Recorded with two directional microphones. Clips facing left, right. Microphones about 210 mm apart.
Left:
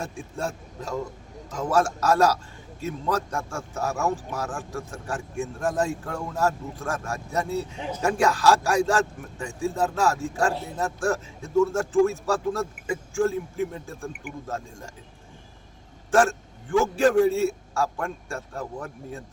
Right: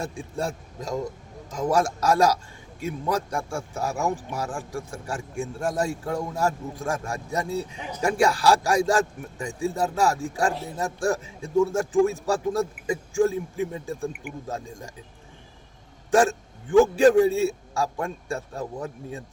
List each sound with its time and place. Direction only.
0.0 s a man's voice: 15° right (ahead or behind)
17.0 s a man's voice: 15° right (ahead or behind)